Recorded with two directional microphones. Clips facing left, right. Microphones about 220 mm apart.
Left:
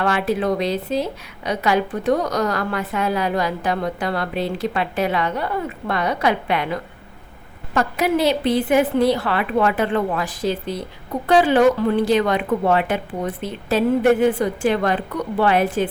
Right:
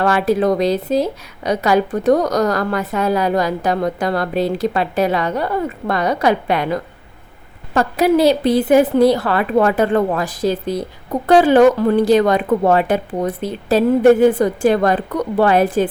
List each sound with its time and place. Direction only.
0.0 s a woman's voice: 40° right (ahead or behind)